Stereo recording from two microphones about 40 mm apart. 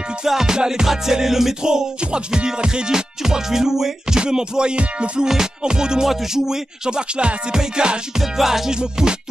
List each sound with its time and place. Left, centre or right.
0.2 s music: centre
1.6 s music: centre
8.4 s music: centre